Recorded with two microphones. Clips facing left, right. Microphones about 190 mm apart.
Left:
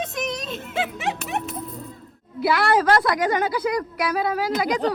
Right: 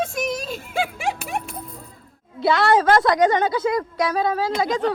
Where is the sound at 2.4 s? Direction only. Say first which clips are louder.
Right 2 dB; 25° right (ahead or behind).